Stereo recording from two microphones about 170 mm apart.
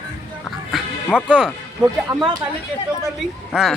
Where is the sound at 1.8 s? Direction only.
25° right (ahead or behind).